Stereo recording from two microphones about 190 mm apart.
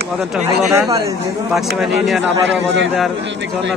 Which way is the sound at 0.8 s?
15° right (ahead or behind).